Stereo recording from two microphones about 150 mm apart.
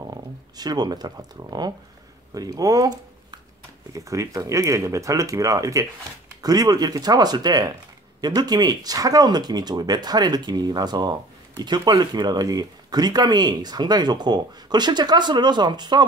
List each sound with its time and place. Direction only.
0.1 s speech: 25° right (ahead or behind)